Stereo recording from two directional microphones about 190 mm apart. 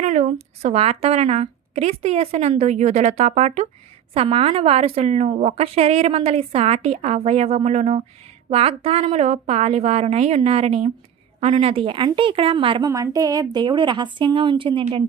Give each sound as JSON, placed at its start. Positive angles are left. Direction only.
{"t": 0.0, "sound": "a woman's voice", "side_deg": -35}